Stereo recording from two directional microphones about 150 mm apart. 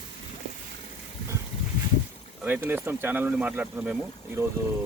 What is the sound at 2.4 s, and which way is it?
Speech, 15° right (ahead or behind).